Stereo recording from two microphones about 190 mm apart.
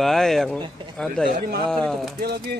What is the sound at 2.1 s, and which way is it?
Speech, 55° right (ahead or behind).